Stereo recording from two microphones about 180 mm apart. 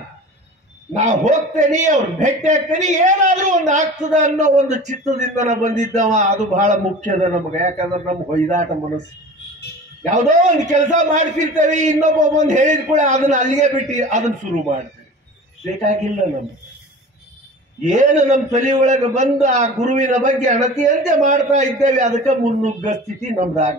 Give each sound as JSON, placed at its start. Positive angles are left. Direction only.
{"t": 0.9, "sound": "a man's voice", "side_deg": -40}
{"t": 10.1, "sound": "a man's voice", "side_deg": -45}
{"t": 15.6, "sound": "a man's voice", "side_deg": -40}
{"t": 17.8, "sound": "a man's voice", "side_deg": -40}